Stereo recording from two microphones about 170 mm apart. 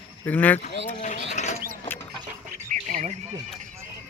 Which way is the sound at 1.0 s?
45° left (ahead or behind).